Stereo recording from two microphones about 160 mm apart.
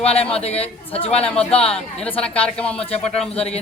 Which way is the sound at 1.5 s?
40° left (ahead or behind).